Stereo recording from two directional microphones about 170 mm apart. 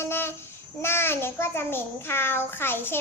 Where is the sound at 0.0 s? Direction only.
15° left (ahead or behind).